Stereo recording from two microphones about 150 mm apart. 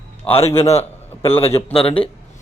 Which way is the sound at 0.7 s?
40° left (ahead or behind).